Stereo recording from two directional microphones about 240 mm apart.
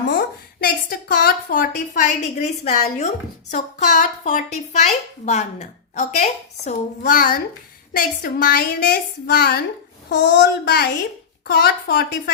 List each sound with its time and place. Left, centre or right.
0.6 s a woman's voice: left